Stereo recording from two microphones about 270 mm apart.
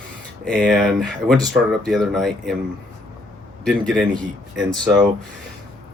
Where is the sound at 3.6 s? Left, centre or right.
Centre.